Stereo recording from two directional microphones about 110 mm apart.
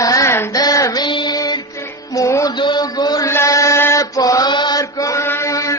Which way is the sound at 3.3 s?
25° left (ahead or behind).